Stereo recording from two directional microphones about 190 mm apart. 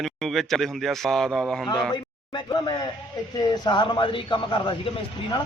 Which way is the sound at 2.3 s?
25° left (ahead or behind).